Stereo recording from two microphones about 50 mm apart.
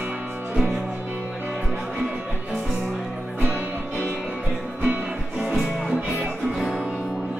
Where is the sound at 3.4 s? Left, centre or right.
Right.